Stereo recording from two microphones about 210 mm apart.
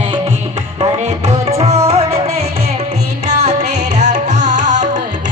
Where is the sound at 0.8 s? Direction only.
30° right (ahead or behind).